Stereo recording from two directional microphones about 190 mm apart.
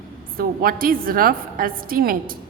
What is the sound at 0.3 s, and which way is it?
A woman's voice, 50° right (ahead or behind).